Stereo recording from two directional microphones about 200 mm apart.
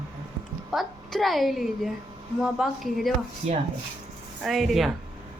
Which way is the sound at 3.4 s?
30° right (ahead or behind).